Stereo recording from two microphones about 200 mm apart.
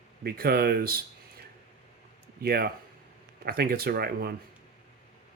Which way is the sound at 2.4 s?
50° right (ahead or behind).